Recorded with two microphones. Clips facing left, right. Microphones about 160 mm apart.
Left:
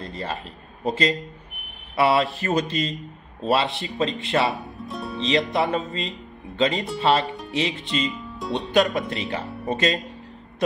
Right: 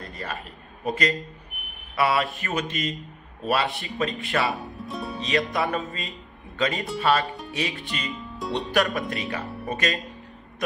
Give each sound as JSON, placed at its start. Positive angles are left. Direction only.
{"t": 0.0, "sound": "a sound", "side_deg": 25}
{"t": 0.8, "sound": "speech", "side_deg": 25}
{"t": 4.5, "sound": "music", "side_deg": 0}
{"t": 5.5, "sound": "speech", "side_deg": 25}
{"t": 8.1, "sound": "speech", "side_deg": 0}
{"t": 8.5, "sound": "speech", "side_deg": 20}